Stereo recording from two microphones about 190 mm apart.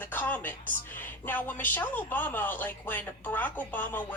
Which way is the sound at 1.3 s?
10° left (ahead or behind).